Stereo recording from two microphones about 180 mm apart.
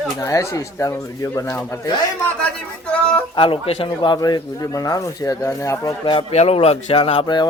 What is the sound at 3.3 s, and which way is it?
Speech, 30° left (ahead or behind).